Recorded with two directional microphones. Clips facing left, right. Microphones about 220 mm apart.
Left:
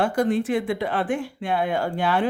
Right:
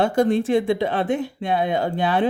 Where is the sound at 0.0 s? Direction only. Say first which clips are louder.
Right 3 dB; 25° right (ahead or behind).